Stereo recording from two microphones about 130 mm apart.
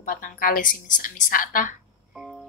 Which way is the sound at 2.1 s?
5° right (ahead or behind).